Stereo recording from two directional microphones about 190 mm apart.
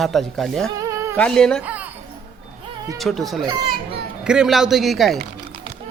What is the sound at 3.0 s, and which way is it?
Speech, centre (ahead or behind).